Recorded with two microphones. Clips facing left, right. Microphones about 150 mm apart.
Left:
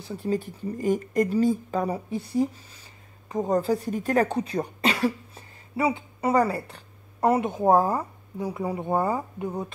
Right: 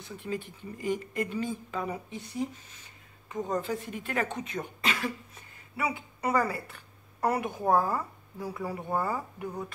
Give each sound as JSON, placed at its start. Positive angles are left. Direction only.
{"t": 0.0, "sound": "speech", "side_deg": 35}